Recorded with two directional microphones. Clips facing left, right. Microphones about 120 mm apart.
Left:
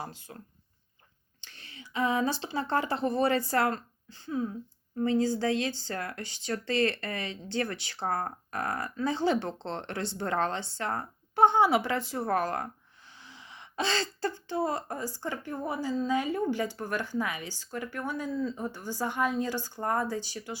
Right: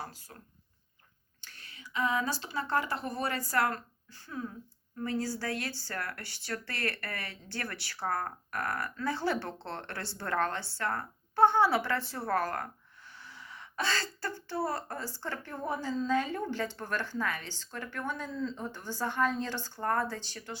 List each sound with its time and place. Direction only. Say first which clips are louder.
0.0 s speech: left 3 dB; 25° left (ahead or behind)
1.4 s speech: left 3 dB; 25° left (ahead or behind)